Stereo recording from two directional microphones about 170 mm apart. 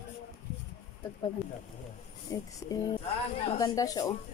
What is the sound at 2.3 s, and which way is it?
Speech, 20° left (ahead or behind).